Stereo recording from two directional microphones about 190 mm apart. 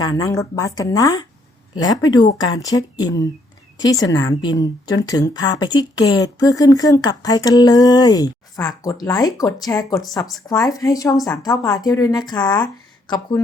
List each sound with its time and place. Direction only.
0.0 s a woman's voice: 20° left (ahead or behind)